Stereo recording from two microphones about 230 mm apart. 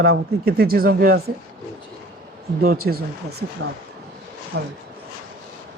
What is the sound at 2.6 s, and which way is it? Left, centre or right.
Speech, right.